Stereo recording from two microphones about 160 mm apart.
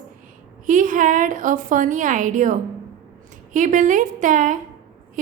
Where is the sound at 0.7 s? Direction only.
55° right (ahead or behind).